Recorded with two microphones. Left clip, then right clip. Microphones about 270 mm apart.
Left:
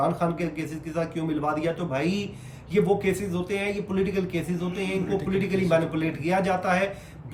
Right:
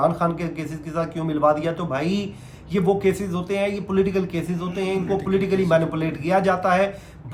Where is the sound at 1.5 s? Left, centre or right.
Centre.